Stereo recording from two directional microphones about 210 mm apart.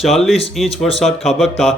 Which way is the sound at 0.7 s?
30° left (ahead or behind).